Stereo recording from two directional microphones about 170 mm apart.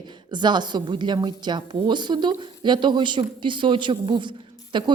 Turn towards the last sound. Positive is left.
turn(degrees=-30)  # may be behind; listen again after turning